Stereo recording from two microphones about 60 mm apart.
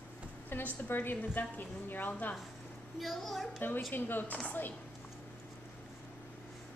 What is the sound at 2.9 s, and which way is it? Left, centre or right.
Speech, centre.